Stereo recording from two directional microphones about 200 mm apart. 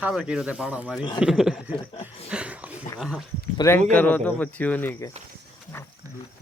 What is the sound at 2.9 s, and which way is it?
Speech, centre (ahead or behind).